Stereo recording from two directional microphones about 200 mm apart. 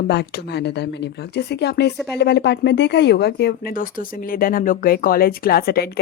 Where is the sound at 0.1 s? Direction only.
55° left (ahead or behind).